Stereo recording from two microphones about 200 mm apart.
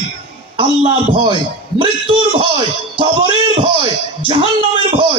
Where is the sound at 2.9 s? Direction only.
25° right (ahead or behind).